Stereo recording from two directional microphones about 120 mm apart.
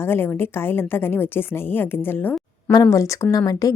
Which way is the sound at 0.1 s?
20° left (ahead or behind).